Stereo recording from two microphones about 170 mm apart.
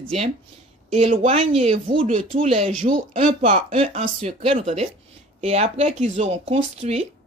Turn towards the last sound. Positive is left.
turn(degrees=-40)  # may be behind; listen again after turning